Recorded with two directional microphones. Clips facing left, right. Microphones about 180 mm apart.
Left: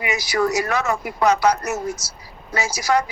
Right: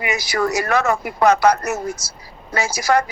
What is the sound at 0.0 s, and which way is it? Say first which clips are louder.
A woman's voice: even; 55° right (ahead or behind).